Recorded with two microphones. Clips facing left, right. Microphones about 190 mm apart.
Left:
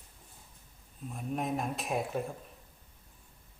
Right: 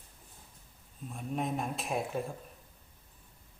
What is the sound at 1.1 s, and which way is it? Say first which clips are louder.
Speech: left 1 dB; centre (ahead or behind).